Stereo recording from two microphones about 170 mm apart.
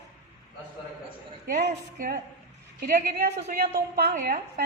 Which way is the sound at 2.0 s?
55° right (ahead or behind).